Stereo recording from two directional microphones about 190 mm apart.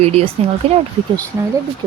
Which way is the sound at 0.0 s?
35° right (ahead or behind).